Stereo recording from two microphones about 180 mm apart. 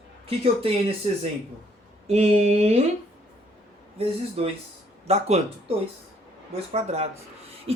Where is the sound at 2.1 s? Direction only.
35° right (ahead or behind).